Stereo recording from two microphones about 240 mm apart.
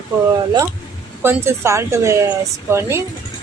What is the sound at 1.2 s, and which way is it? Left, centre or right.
A woman's voice, centre.